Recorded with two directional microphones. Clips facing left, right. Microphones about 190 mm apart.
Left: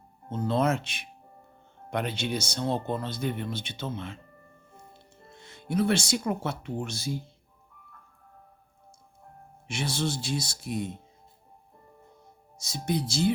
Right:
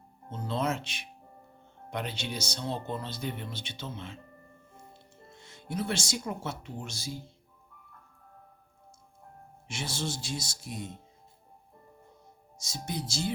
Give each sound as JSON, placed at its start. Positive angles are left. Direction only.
{"t": 0.3, "sound": "speech", "side_deg": 50}
{"t": 5.4, "sound": "speech", "side_deg": 60}
{"t": 9.6, "sound": "speech", "side_deg": 60}
{"t": 12.5, "sound": "speech", "side_deg": 60}